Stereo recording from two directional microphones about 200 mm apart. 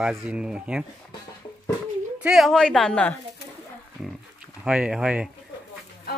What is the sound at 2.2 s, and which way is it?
Speech, centre (ahead or behind).